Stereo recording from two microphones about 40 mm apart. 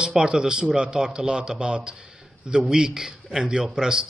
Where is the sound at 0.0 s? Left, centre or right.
Centre.